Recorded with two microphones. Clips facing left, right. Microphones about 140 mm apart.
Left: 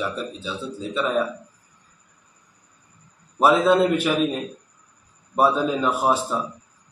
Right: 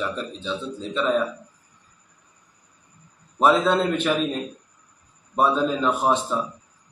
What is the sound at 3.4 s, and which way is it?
Speech, 10° left (ahead or behind).